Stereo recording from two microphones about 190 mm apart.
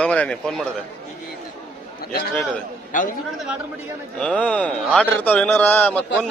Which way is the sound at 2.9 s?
45° left (ahead or behind).